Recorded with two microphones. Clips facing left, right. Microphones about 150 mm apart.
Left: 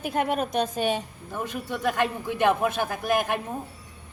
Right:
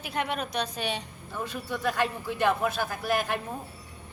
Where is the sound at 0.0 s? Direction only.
45° left (ahead or behind).